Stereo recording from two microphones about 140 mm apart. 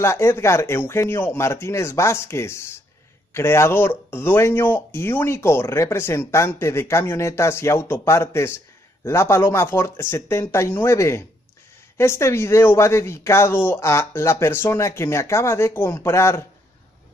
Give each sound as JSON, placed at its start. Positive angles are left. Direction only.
{"t": 0.0, "sound": "speech", "side_deg": 20}